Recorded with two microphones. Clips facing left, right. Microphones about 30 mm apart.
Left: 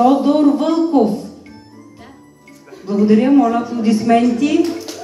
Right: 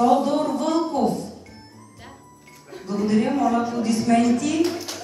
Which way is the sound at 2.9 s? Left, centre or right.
Left.